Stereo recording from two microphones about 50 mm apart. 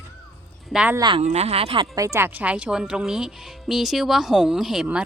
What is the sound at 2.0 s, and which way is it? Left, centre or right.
Speech, right.